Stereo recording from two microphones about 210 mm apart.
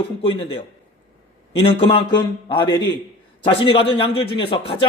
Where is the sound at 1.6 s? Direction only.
25° left (ahead or behind).